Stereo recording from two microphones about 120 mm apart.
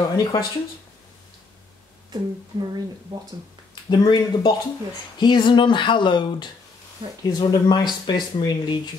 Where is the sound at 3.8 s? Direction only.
35° left (ahead or behind).